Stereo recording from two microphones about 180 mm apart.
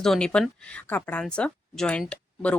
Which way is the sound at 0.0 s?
5° left (ahead or behind).